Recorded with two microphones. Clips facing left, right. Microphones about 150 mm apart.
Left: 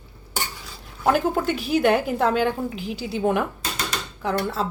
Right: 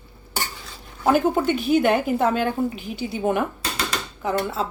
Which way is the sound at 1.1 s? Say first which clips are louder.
Right 2 dB; centre (ahead or behind).